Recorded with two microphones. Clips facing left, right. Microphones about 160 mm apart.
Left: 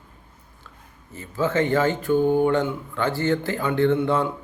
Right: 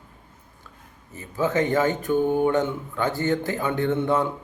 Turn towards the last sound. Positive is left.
turn(degrees=-20)  # may be behind; listen again after turning